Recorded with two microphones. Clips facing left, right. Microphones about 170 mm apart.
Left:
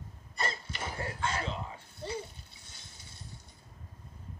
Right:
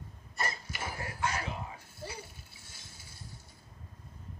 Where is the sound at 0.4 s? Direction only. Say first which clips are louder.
Left 1 dB; 25° left (ahead or behind).